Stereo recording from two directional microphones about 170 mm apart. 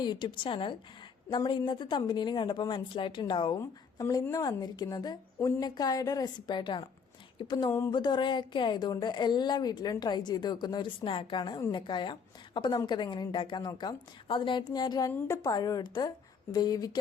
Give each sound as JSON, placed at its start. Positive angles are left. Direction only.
{"t": 0.0, "sound": "speech", "side_deg": 25}
{"t": 7.9, "sound": "speech", "side_deg": 25}